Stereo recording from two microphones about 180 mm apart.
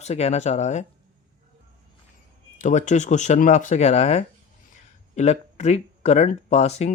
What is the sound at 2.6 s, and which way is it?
Speech, 40° left (ahead or behind).